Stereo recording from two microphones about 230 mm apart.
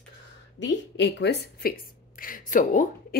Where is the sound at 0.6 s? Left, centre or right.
Left.